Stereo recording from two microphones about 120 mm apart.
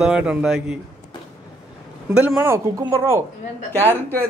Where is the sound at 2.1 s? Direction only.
15° right (ahead or behind).